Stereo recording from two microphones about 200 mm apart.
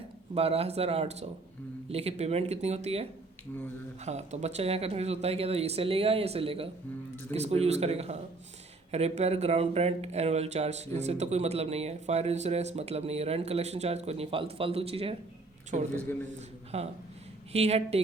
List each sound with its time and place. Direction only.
0.3 s speech: 30° right (ahead or behind)